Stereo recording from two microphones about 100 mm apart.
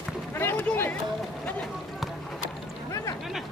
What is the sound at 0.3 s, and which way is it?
Speech, 20° left (ahead or behind).